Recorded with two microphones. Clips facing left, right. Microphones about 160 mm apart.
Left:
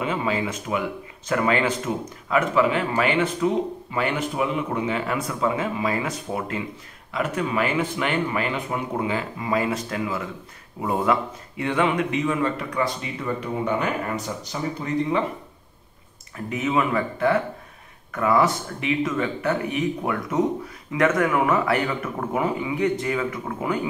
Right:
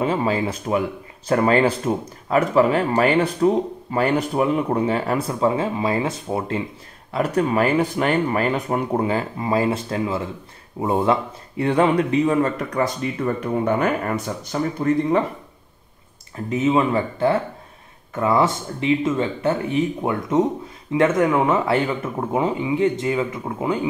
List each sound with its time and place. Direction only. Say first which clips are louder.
0.0 s a man's voice: right 4 dB; 35° right (ahead or behind)
16.4 s speech: right 4 dB; 30° right (ahead or behind)